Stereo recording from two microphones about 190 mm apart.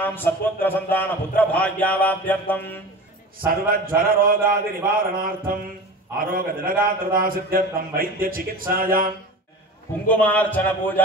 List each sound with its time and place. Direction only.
0.0 s a man's voice: 10° left (ahead or behind)
3.6 s a man's voice: 50° right (ahead or behind)
10.0 s a man's voice: 5° left (ahead or behind)